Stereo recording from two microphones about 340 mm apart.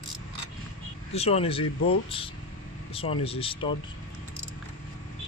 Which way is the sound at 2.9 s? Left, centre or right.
Centre.